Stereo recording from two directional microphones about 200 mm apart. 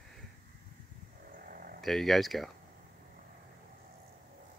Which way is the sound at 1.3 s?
45° right (ahead or behind).